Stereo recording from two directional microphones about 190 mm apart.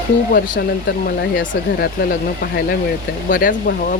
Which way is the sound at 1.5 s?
50° left (ahead or behind).